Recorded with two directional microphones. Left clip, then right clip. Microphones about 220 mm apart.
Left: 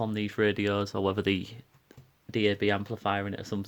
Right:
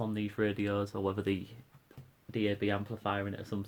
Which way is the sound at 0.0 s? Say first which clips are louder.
Left 6 dB; 40° left (ahead or behind).